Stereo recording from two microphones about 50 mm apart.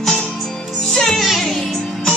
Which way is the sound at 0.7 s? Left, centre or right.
Centre.